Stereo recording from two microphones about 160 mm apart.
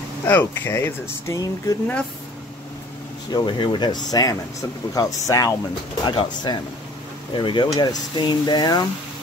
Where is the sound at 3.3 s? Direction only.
30° left (ahead or behind).